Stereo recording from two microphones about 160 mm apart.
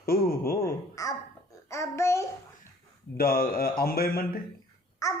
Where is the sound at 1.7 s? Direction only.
15° left (ahead or behind).